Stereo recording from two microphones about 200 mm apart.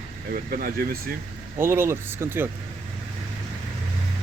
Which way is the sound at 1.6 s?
10° right (ahead or behind).